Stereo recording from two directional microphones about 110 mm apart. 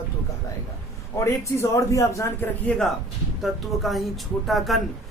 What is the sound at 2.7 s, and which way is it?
Speech, 10° left (ahead or behind).